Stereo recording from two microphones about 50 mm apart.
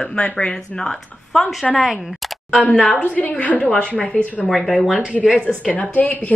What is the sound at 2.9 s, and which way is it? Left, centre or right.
A woman's voice, left.